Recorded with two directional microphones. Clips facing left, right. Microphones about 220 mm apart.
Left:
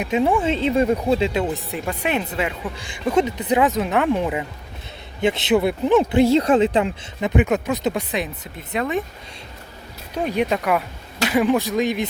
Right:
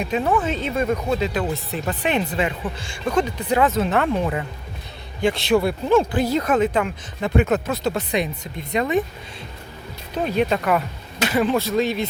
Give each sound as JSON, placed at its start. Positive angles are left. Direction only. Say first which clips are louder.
{"t": 0.0, "sound": "speech", "louder": "left 2 dB", "side_deg": 20}
{"t": 0.4, "sound": "speech", "louder": "left 4 dB", "side_deg": 25}
{"t": 1.9, "sound": "speech", "louder": "right 1 dB", "side_deg": 10}
{"t": 8.1, "sound": "speech", "louder": "right 3 dB", "side_deg": 5}
{"t": 10.2, "sound": "speech", "louder": "even", "side_deg": 10}